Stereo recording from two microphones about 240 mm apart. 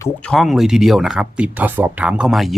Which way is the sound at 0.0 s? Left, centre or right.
Centre.